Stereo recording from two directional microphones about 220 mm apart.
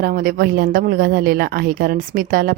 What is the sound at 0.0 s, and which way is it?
Speech, 40° right (ahead or behind).